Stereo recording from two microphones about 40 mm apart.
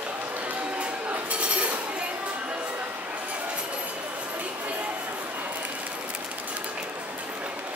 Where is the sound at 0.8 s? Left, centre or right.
Right.